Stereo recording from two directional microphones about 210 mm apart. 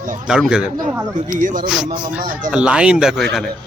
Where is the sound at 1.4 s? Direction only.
40° right (ahead or behind).